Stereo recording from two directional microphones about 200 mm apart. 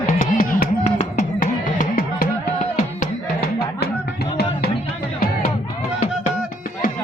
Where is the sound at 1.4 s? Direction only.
45° left (ahead or behind).